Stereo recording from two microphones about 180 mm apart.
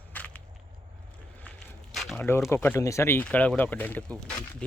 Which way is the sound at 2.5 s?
10° left (ahead or behind).